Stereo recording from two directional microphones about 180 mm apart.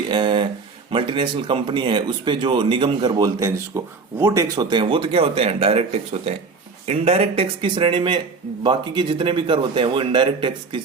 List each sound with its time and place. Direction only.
0.1 s speech: 25° right (ahead or behind)